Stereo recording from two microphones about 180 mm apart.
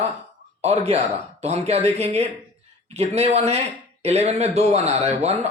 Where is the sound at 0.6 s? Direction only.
35° right (ahead or behind).